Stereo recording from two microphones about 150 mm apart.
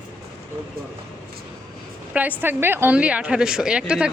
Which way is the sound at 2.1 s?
10° right (ahead or behind).